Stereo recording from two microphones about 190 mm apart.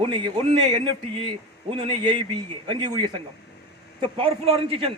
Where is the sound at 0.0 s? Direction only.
25° right (ahead or behind).